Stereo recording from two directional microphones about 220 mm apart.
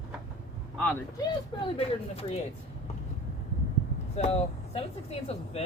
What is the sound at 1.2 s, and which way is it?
Speech, 25° left (ahead or behind).